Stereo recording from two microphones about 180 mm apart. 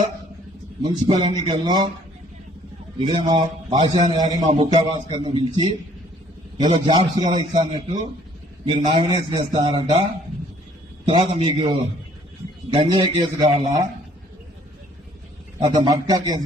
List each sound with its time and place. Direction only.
1.2 s a man's voice: 25° right (ahead or behind)
3.0 s a man's voice: 25° right (ahead or behind)
11.0 s a man's voice: 30° right (ahead or behind)
15.6 s a man's voice: 20° right (ahead or behind)